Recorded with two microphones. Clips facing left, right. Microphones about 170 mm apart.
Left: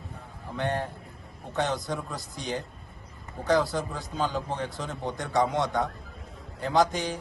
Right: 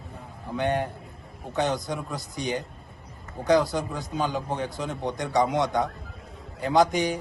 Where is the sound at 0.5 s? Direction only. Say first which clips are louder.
Right 4 dB; centre (ahead or behind).